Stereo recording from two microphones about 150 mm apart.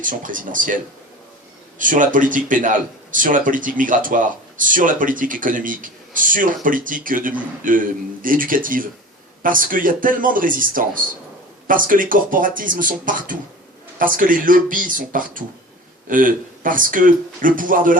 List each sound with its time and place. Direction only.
0.0 s a man's voice: 60° right (ahead or behind)
1.8 s a man's voice: 60° right (ahead or behind)